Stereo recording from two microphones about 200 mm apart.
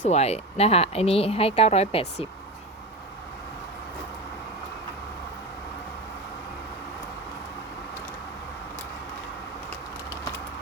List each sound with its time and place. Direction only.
0.0 s speech: 35° left (ahead or behind)